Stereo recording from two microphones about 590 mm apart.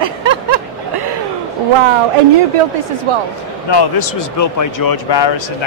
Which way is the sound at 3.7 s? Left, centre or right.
Left.